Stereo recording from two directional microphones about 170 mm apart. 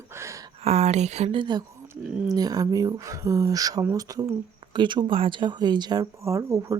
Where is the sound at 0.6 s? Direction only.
40° right (ahead or behind).